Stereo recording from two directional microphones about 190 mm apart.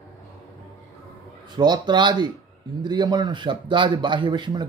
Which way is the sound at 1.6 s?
25° right (ahead or behind).